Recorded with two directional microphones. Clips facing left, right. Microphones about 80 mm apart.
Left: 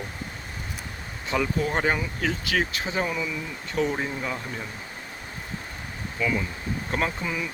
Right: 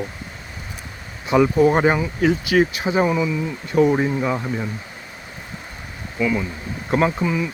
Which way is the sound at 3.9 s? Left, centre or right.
Right.